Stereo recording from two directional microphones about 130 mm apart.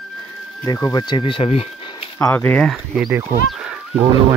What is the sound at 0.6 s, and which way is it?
Speech, 30° left (ahead or behind).